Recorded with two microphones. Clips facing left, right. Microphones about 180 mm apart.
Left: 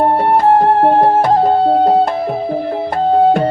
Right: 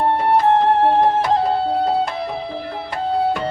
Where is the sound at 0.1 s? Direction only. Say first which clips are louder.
Left 4 dB; 45° left (ahead or behind).